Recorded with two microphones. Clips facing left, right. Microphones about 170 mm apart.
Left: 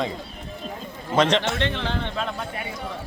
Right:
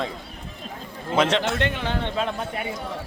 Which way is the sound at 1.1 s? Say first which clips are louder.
Left 1 dB; 5° right (ahead or behind).